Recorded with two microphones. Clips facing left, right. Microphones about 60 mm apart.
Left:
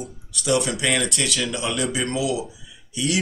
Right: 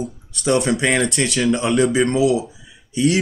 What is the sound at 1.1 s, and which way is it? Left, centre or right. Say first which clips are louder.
Speech: right 7 dB; right.